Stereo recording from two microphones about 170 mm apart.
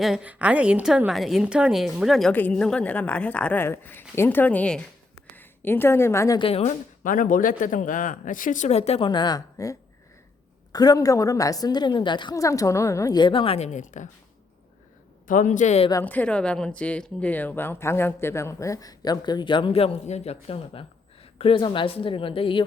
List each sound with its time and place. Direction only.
0.0 s a woman's voice: 5° right (ahead or behind); by 6.4 s 20° left (ahead or behind)
6.4 s a woman's voice: 40° left (ahead or behind)
15.3 s speech: 50° left (ahead or behind)
15.9 s a woman's voice: 15° left (ahead or behind); by 22.6 s 30° left (ahead or behind)